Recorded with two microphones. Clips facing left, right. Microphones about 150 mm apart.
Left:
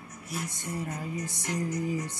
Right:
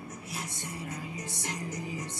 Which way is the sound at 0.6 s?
45° left (ahead or behind).